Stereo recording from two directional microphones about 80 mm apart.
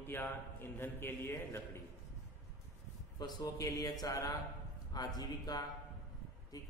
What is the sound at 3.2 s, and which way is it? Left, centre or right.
Speech, left.